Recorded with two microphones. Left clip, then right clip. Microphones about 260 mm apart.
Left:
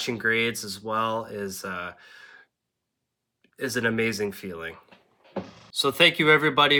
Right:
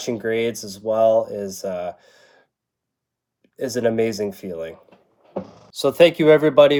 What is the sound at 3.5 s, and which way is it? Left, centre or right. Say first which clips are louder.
Speech: right 5 dB; left.